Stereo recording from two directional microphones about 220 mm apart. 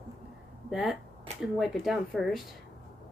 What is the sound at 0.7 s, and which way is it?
Speech, centre (ahead or behind).